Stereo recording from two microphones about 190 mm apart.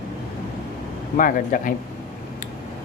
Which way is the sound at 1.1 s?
45° left (ahead or behind).